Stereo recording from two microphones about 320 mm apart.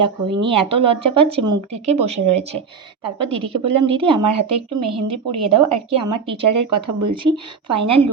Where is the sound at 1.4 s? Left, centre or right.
Right.